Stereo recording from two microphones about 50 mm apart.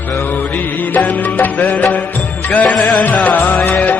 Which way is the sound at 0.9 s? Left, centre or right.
Left.